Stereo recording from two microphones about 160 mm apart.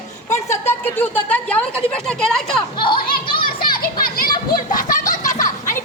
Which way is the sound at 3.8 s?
65° left (ahead or behind).